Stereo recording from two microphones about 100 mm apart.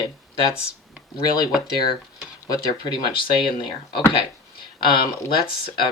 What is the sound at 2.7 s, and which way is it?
Speech, 50° left (ahead or behind).